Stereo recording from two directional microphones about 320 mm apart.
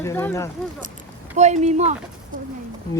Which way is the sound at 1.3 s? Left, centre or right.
Right.